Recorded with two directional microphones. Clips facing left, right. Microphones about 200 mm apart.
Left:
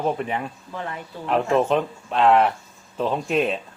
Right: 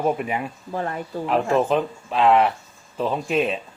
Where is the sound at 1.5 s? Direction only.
Centre (ahead or behind).